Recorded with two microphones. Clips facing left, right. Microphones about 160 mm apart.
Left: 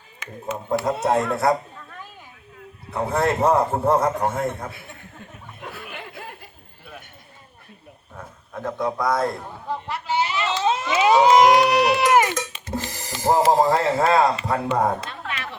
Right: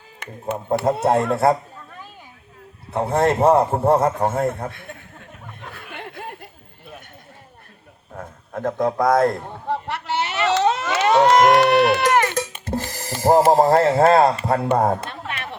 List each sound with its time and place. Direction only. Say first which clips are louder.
0.2 s speech: right 1 dB; 60° right (ahead or behind)
1.1 s a man's voice: right 1 dB; 30° right (ahead or behind)
2.9 s a man's voice: right 3 dB; 30° right (ahead or behind)
8.1 s a sound: right 5 dB; 50° right (ahead or behind); by 10.9 s 70° right (ahead or behind)
10.9 s crowd: left 1 dB; centre (ahead or behind)
11.3 s speech: right 1 dB; centre (ahead or behind)
12.6 s speech: right 3 dB; 45° right (ahead or behind)